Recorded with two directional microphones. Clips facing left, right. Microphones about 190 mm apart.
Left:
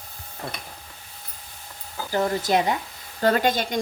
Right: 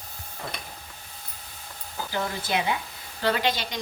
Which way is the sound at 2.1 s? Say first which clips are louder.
Left 7 dB; 40° left (ahead or behind).